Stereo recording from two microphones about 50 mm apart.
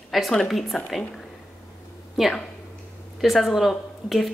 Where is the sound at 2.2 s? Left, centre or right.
Centre.